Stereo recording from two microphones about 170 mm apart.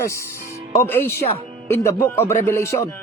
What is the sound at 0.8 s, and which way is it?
Speech, 15° left (ahead or behind).